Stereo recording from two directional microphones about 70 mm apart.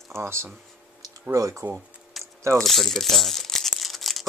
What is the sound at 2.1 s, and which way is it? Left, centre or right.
Mechanisms, centre.